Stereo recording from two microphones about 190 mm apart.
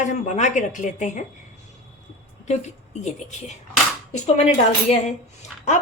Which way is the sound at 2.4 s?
40° left (ahead or behind).